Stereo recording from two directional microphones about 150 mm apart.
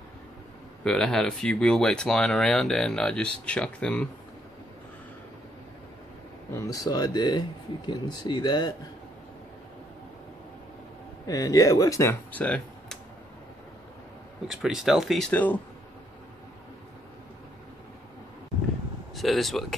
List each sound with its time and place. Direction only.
0.8 s speech: 5° left (ahead or behind)
6.5 s speech: 20° left (ahead or behind)
11.2 s speech: 25° left (ahead or behind); by 13.0 s 5° left (ahead or behind)
14.5 s speech: centre (ahead or behind)
19.1 s speech: centre (ahead or behind)